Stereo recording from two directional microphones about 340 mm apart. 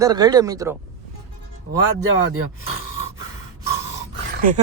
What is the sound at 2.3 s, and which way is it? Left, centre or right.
Speech, right.